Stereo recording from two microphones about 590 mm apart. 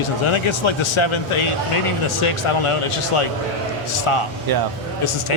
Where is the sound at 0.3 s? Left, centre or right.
Left.